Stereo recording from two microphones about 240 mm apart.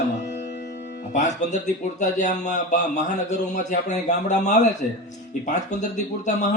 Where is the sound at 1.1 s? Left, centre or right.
Left.